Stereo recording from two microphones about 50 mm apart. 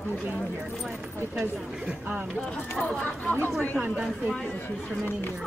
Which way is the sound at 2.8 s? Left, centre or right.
Left.